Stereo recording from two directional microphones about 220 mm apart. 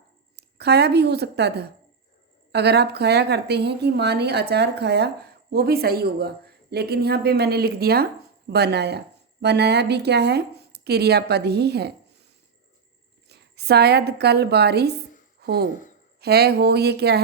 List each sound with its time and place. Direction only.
0.3 s speech: 50° right (ahead or behind)
13.2 s a woman's voice: 45° right (ahead or behind)